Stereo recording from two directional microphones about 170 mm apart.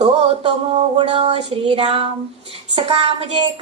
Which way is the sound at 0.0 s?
40° right (ahead or behind).